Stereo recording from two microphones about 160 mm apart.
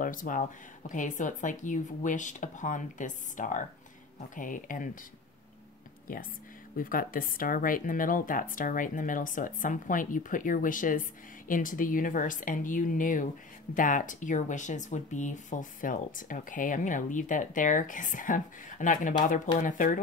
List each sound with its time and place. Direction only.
0.0 s a woman's voice: 55° left (ahead or behind)
6.8 s a woman's voice: 60° left (ahead or behind)